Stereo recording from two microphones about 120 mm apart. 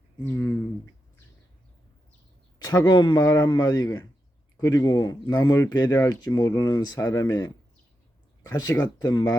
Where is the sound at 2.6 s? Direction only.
35° left (ahead or behind).